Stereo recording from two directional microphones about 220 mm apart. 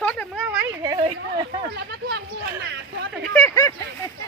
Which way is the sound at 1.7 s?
50° right (ahead or behind).